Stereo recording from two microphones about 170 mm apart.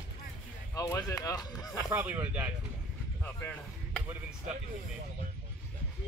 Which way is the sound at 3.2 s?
10° left (ahead or behind).